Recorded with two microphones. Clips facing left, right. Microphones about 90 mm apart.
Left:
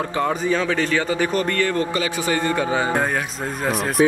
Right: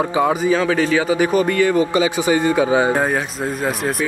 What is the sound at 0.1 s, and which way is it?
Speech, 10° right (ahead or behind).